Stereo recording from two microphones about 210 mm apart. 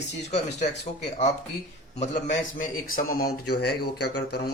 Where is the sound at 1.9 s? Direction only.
35° left (ahead or behind).